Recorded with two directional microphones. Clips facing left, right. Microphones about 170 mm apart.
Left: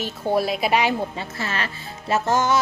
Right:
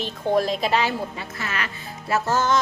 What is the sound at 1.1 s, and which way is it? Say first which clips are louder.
Speech: left 2 dB; 30° left (ahead or behind).